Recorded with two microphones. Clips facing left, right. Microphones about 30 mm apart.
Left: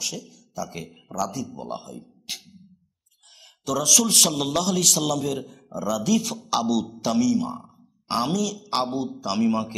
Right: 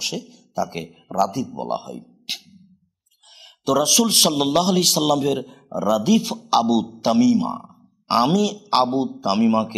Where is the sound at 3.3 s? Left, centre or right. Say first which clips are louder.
Right 7 dB; right.